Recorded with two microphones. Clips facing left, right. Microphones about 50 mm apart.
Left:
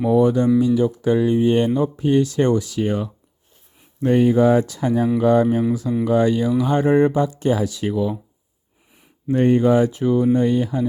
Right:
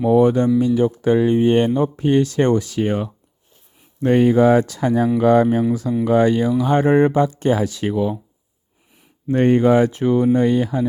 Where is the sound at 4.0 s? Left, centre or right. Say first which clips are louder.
Right 2 dB; right.